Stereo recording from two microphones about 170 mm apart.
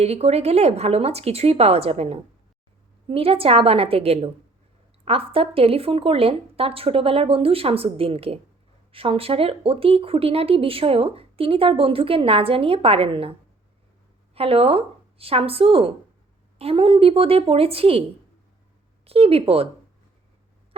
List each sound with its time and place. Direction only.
0.0 s speech: 40° right (ahead or behind)
14.3 s speech: 35° right (ahead or behind)
19.0 s speech: 35° right (ahead or behind)